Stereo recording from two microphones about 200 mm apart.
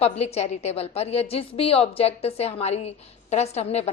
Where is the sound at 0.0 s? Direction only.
30° left (ahead or behind).